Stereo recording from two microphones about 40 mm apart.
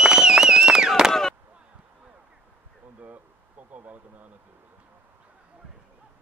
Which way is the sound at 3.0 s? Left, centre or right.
Right.